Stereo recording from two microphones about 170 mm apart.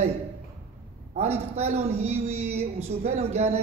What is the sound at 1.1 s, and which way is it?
Speech, 40° right (ahead or behind).